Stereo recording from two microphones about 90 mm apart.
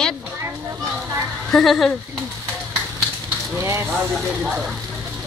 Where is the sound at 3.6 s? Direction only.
30° right (ahead or behind).